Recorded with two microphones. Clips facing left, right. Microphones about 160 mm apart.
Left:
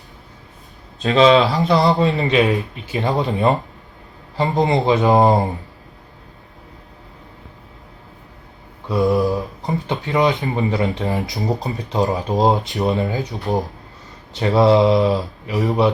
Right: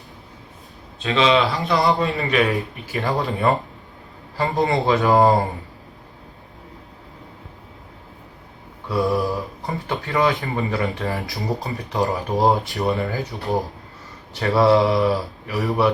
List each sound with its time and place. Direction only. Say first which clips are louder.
1.0 s speech: left 6 dB; 40° left (ahead or behind)
1.6 s a man's voice: left 3 dB; centre (ahead or behind)
2.0 s speech: left 4 dB; 20° left (ahead or behind)
8.9 s speech: left 4 dB; 20° left (ahead or behind)